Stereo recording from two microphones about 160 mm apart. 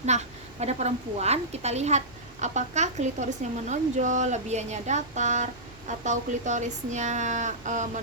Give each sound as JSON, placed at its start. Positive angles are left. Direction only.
{"t": 0.1, "sound": "a woman's voice", "side_deg": -45}